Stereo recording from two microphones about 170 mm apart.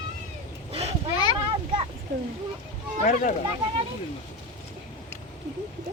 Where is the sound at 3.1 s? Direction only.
45° left (ahead or behind).